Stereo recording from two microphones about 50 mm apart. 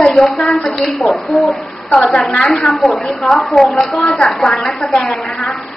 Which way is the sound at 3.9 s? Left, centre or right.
Centre.